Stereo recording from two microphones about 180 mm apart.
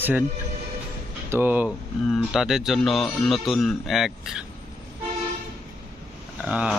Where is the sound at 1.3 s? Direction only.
10° right (ahead or behind).